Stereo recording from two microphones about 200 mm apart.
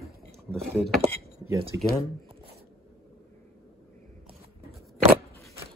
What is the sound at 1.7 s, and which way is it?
Speech, 65° right (ahead or behind).